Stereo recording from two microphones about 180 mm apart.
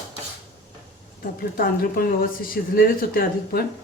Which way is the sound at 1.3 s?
55° left (ahead or behind).